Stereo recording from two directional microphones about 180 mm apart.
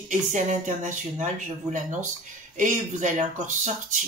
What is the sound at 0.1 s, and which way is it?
Speech, 45° right (ahead or behind).